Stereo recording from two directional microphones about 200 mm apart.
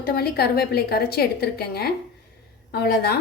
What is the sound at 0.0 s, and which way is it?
A woman's voice, 50° left (ahead or behind).